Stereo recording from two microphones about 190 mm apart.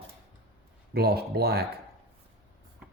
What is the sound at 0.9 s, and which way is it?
Speech, 55° right (ahead or behind).